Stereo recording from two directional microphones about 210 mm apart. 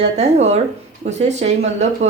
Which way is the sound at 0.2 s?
30° right (ahead or behind).